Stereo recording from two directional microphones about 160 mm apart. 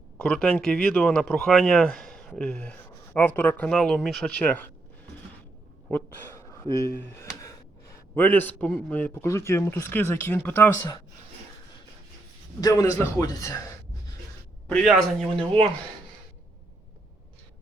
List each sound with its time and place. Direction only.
0.2 s speech: 5° left (ahead or behind)
5.9 s speech: 15° left (ahead or behind)
12.5 s a man's voice: 25° left (ahead or behind)
14.7 s speech: centre (ahead or behind)